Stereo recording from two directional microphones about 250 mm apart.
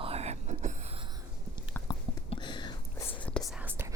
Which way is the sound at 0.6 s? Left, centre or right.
Right.